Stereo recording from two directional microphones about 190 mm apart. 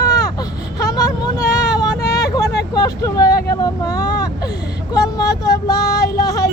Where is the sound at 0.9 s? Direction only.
20° left (ahead or behind).